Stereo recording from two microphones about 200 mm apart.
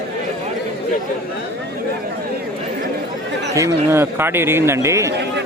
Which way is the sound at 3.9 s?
10° right (ahead or behind).